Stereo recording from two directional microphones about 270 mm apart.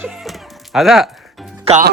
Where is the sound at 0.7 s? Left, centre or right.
Centre.